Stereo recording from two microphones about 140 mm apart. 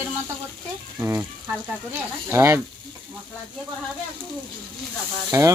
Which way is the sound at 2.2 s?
20° right (ahead or behind).